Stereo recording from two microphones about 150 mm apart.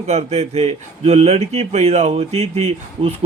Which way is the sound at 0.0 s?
45° right (ahead or behind).